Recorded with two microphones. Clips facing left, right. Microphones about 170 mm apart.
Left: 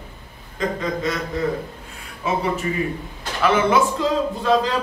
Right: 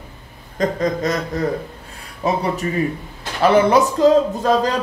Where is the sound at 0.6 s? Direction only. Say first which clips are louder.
Right 4 dB; 40° right (ahead or behind).